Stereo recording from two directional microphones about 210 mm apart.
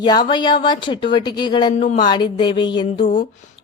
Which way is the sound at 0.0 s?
20° left (ahead or behind).